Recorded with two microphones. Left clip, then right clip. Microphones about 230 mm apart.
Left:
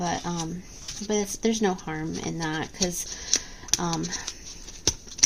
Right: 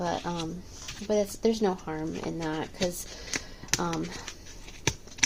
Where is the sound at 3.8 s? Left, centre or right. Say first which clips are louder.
Left 2 dB; left.